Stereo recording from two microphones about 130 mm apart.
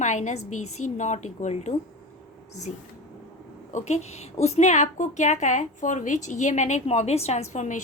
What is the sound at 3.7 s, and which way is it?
A woman's voice, 60° left (ahead or behind).